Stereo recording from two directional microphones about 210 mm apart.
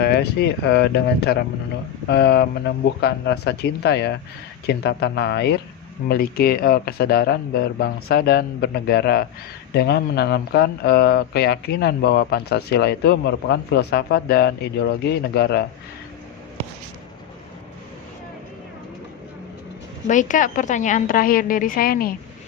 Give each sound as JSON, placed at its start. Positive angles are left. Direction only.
{"t": 0.0, "sound": "speech", "side_deg": 50}
{"t": 20.1, "sound": "a woman's voice", "side_deg": 35}